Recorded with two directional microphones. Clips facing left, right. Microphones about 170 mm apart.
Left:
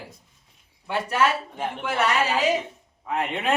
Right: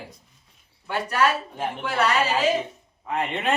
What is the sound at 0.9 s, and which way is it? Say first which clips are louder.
Speech: even; 25° left (ahead or behind).